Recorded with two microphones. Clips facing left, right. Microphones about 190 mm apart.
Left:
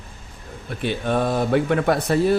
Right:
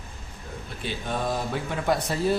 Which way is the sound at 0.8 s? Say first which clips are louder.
Left 8 dB; 65° left (ahead or behind).